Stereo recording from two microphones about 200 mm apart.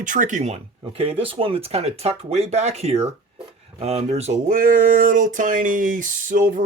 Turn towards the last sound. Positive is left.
turn(degrees=-40)  # may be behind; listen again after turning